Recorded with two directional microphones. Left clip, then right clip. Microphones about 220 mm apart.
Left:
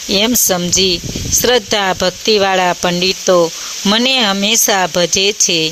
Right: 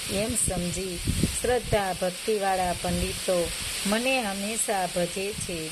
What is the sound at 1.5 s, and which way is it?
Speech, 50° left (ahead or behind).